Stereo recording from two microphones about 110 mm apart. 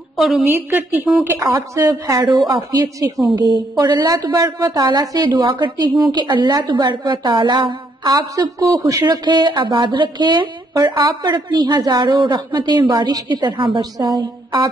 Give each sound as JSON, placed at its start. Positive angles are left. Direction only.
{"t": 0.2, "sound": "a woman's voice", "side_deg": 0}
{"t": 0.5, "sound": "a woman's voice", "side_deg": -20}
{"t": 1.4, "sound": "a woman's voice", "side_deg": -30}
{"t": 2.2, "sound": "speech", "side_deg": -40}
{"t": 5.4, "sound": "speech", "side_deg": -50}
{"t": 9.0, "sound": "speech", "side_deg": -40}
{"t": 13.9, "sound": "a woman's voice", "side_deg": -40}